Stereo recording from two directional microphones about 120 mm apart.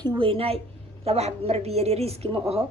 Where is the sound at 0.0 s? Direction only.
40° right (ahead or behind).